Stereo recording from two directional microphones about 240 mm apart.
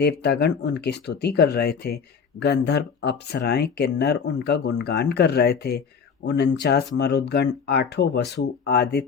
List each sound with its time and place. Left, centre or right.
0.0 s speech: left